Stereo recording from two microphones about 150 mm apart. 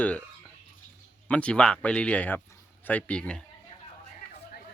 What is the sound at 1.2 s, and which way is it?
Speech, 5° left (ahead or behind).